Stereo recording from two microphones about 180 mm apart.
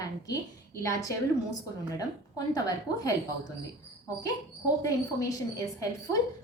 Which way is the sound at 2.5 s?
20° left (ahead or behind).